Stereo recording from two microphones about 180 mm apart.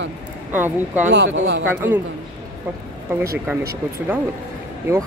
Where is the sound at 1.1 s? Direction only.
80° right.